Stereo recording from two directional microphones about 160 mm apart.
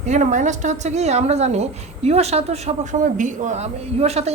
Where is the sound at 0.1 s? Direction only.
50° right (ahead or behind).